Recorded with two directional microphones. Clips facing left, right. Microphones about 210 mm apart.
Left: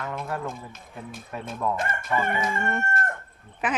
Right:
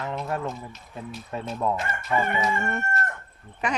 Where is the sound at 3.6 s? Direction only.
5° left (ahead or behind).